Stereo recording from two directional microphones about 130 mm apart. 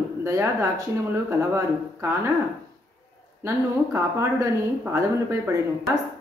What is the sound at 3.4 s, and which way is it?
A woman's voice, 20° right (ahead or behind).